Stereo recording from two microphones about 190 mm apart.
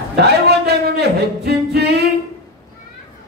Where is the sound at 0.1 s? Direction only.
60° right (ahead or behind).